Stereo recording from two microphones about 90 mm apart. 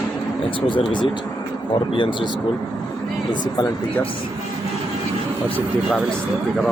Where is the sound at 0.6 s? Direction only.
70° left (ahead or behind).